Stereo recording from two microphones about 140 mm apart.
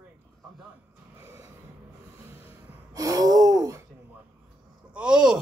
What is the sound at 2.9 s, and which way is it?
Gasp, 25° right (ahead or behind).